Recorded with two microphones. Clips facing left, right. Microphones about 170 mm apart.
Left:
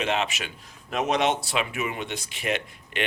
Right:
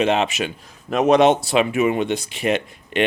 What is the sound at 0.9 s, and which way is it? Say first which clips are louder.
Speech: right 10 dB; 60° right (ahead or behind).